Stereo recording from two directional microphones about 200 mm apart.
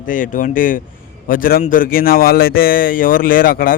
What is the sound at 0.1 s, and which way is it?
A man's voice, 40° left (ahead or behind).